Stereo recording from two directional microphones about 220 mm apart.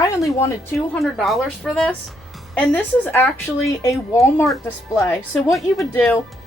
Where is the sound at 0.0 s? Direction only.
15° left (ahead or behind).